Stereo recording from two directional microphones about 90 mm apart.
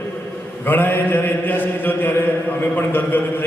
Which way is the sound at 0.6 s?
20° left (ahead or behind).